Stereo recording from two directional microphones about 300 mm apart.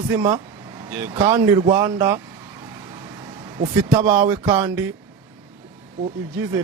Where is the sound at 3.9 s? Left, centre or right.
Centre.